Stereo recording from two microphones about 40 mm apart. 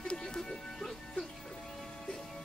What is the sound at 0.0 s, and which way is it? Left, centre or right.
Music, left.